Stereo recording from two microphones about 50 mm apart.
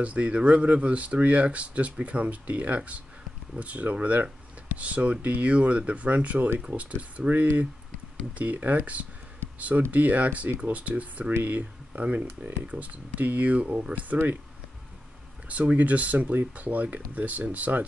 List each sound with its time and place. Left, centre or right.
0.0 s speech: right
12.2 s speech: right
12.6 s speech: right
14.1 s speech: right
15.4 s speech: right